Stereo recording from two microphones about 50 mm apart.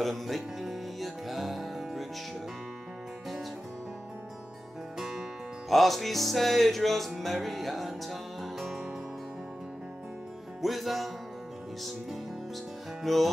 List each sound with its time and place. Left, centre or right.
0.0 s music: centre
4.9 s music: centre
10.6 s music: centre
13.0 s music: centre